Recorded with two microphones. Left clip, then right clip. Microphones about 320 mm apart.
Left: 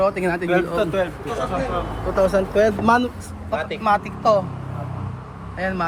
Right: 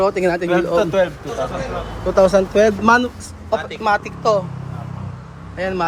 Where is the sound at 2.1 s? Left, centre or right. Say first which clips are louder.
Right 5 dB; centre.